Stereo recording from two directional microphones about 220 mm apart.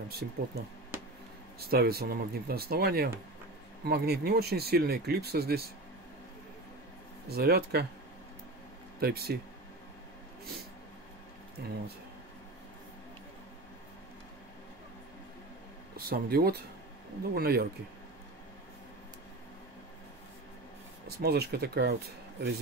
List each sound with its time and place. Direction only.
0.2 s speech: 50° right (ahead or behind)
1.6 s speech: 45° right (ahead or behind)
7.2 s speech: 45° right (ahead or behind)
9.0 s speech: 45° right (ahead or behind)
11.6 s speech: 50° right (ahead or behind)
16.0 s speech: 45° right (ahead or behind)
21.2 s speech: 45° right (ahead or behind)